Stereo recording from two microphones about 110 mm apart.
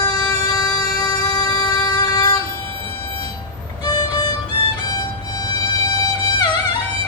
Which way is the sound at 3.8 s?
40° left (ahead or behind).